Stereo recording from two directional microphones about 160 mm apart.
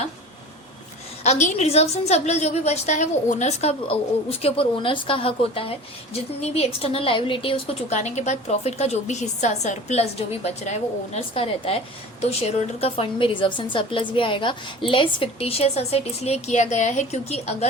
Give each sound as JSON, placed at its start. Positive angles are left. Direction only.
{"t": 1.2, "sound": "a woman's voice", "side_deg": 45}